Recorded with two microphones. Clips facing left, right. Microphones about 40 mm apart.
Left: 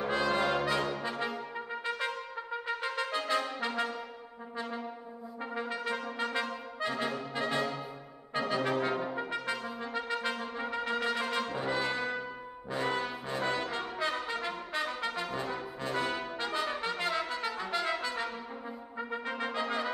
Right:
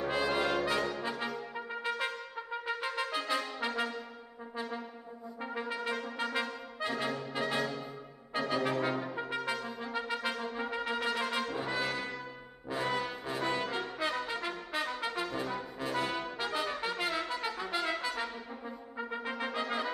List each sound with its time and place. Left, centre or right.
0.1 s brass instrument: centre
1.5 s trumpet: centre
5.4 s trumpet: centre
6.1 s brass instrument: centre
9.1 s trumpet: centre
10.4 s brass instrument: centre
11.9 s brass instrument: left
12.6 s brass instrument: centre
14.7 s trumpet: centre
15.5 s brass instrument: centre
16.3 s trumpet: centre